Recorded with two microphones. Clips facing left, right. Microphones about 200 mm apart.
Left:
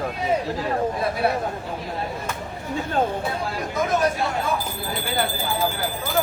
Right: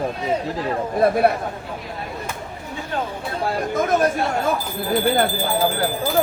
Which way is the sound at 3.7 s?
50° right (ahead or behind).